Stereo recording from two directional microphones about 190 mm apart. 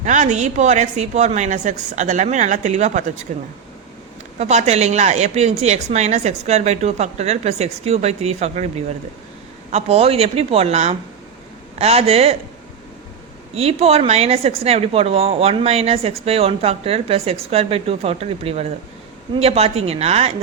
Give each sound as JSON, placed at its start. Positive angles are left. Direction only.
{"t": 0.0, "sound": "speech", "side_deg": -40}
{"t": 9.7, "sound": "speech", "side_deg": -30}
{"t": 13.6, "sound": "speech", "side_deg": -30}